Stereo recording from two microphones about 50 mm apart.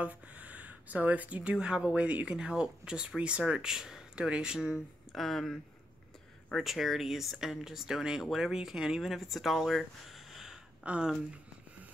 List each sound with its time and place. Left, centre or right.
0.0 s speech: right
5.1 s speech: centre
10.3 s gasp: centre
10.8 s speech: right